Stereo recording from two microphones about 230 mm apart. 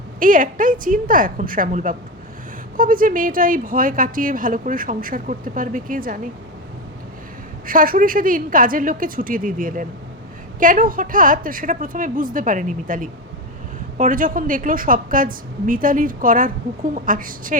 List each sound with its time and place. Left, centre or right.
0.2 s speech: right
7.7 s speech: right